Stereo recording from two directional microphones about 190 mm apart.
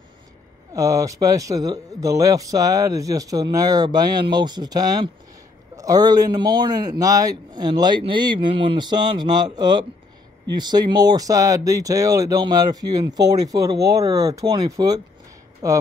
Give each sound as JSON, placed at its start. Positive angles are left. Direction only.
{"t": 0.7, "sound": "speech", "side_deg": -15}